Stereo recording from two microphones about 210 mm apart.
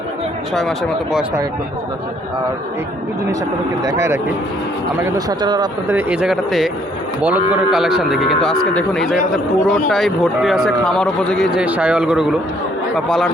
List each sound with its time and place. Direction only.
3.8 s speech: 15° right (ahead or behind)
5.9 s a man's voice: 10° right (ahead or behind)